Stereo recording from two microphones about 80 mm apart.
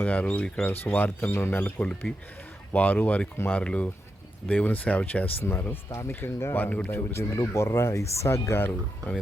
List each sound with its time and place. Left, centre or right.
0.0 s speech: left
5.4 s speech: left
6.1 s speech: left